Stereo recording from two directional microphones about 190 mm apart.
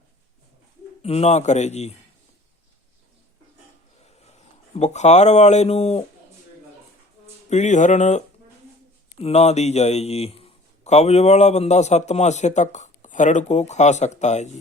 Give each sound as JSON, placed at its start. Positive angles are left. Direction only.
{"t": 1.0, "sound": "a man's voice", "side_deg": 35}
{"t": 4.3, "sound": "speech", "side_deg": 35}
{"t": 7.5, "sound": "a man's voice", "side_deg": 40}